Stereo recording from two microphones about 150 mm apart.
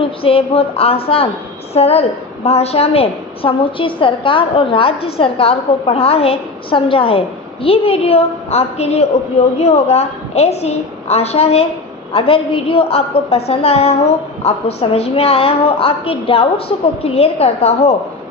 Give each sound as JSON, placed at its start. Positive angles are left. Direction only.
{"t": 0.0, "sound": "a woman's voice", "side_deg": 40}